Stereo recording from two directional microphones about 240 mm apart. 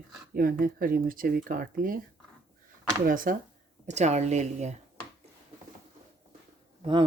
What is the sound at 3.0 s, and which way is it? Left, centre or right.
A woman's voice, right.